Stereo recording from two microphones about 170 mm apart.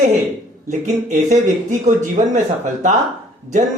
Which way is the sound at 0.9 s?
45° right (ahead or behind).